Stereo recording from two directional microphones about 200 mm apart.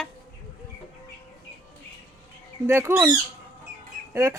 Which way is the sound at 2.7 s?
10° right (ahead or behind).